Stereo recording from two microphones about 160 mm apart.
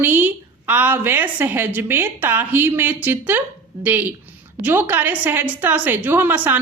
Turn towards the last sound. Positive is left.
turn(degrees=-10)  # may be behind; listen again after turning